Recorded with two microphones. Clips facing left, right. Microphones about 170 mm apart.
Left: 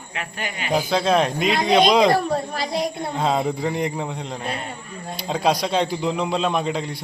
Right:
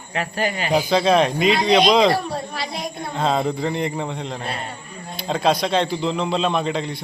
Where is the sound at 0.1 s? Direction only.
35° right (ahead or behind).